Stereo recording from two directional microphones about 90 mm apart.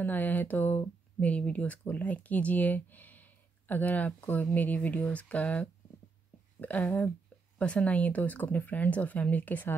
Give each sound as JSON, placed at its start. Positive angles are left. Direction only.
{"t": 0.0, "sound": "speech", "side_deg": 20}